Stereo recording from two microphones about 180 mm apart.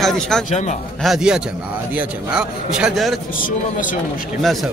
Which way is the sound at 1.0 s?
5° right (ahead or behind).